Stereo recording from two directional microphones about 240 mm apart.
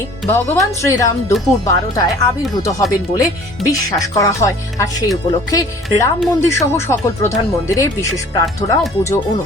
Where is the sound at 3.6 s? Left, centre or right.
Centre.